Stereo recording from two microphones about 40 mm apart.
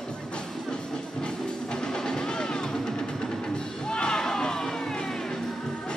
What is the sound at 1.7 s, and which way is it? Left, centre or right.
Music, centre.